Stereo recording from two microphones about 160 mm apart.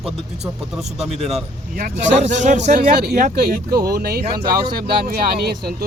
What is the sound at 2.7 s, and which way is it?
Speech, 75° right (ahead or behind).